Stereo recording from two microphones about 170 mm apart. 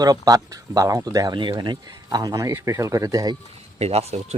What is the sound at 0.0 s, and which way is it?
Speech, 20° right (ahead or behind).